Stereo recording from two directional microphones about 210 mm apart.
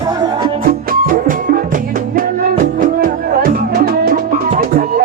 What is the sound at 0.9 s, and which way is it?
Music, 40° right (ahead or behind).